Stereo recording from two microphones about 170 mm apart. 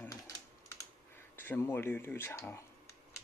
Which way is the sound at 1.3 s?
10° left (ahead or behind).